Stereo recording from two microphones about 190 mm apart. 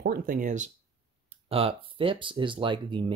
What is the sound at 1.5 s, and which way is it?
Speech, 30° right (ahead or behind).